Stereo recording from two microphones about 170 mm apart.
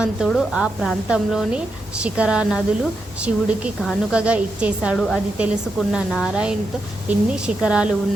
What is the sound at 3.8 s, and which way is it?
A woman's voice, centre (ahead or behind).